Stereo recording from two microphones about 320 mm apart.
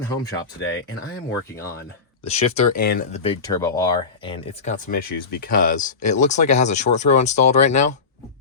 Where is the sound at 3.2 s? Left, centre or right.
Centre.